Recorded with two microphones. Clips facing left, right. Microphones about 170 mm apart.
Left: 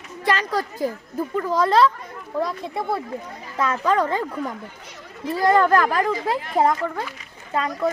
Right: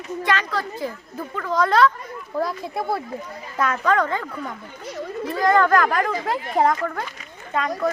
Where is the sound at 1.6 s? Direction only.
30° left (ahead or behind).